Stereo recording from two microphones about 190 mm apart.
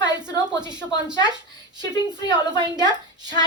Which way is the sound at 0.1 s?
20° right (ahead or behind).